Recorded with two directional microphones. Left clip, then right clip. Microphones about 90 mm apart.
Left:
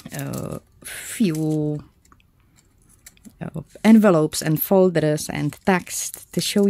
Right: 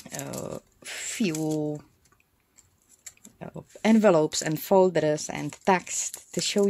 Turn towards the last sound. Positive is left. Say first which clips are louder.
# left 4 dB
turn(degrees=40)  # may be behind; listen again after turning